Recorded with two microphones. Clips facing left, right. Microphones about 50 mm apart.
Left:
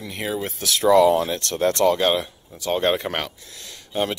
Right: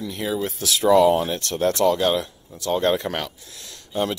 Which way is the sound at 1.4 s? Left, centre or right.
Left.